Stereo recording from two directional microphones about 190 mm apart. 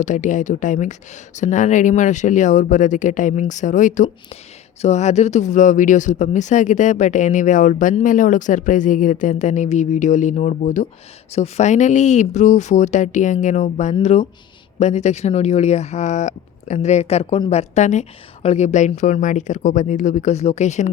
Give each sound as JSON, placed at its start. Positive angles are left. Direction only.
{"t": 0.0, "sound": "speech", "side_deg": 40}